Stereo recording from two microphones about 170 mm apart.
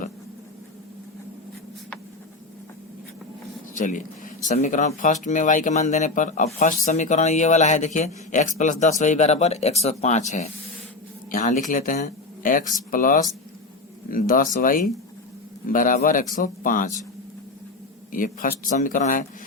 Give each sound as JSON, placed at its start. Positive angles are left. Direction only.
{"t": 3.8, "sound": "speech", "side_deg": 50}
{"t": 11.3, "sound": "speech", "side_deg": 55}
{"t": 18.1, "sound": "speech", "side_deg": 55}